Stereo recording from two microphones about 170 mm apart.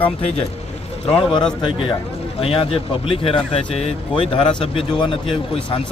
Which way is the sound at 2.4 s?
35° left (ahead or behind).